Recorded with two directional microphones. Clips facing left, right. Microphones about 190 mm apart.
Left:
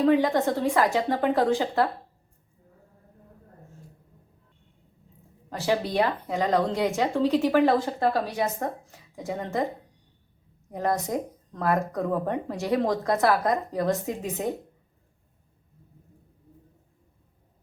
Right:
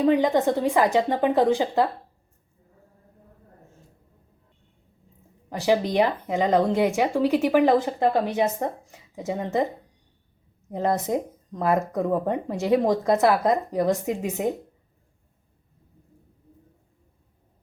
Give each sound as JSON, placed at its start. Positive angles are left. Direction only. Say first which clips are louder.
{"t": 0.0, "sound": "speech", "louder": "right 2 dB", "side_deg": -15}
{"t": 5.5, "sound": "speech", "louder": "right 4 dB", "side_deg": -15}
{"t": 10.7, "sound": "a woman's voice", "louder": "right 3 dB", "side_deg": -20}